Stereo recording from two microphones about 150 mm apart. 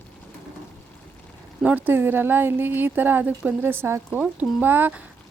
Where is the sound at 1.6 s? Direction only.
10° right (ahead or behind).